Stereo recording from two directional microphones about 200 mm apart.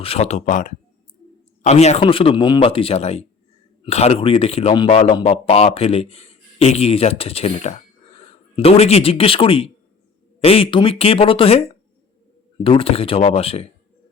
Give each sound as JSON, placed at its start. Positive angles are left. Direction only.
{"t": 0.0, "sound": "speech", "side_deg": 30}
{"t": 12.6, "sound": "speech", "side_deg": 25}